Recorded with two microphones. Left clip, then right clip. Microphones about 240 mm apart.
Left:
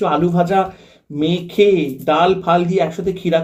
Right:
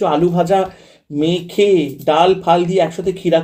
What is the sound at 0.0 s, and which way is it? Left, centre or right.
Speech, right.